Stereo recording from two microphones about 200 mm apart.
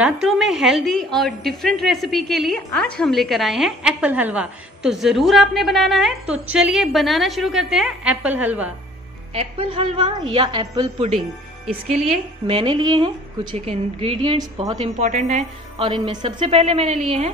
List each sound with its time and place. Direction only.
0.0 s a woman's voice: centre (ahead or behind)
9.3 s a woman's voice: 30° right (ahead or behind)
15.0 s a woman's voice: 35° right (ahead or behind)